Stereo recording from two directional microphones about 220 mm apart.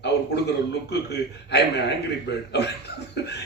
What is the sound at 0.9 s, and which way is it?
A man's voice, 50° left (ahead or behind).